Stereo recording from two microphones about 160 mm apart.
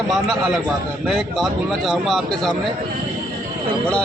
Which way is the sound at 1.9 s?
Centre (ahead or behind).